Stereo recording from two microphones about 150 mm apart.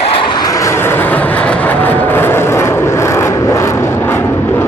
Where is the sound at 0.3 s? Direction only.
25° left (ahead or behind).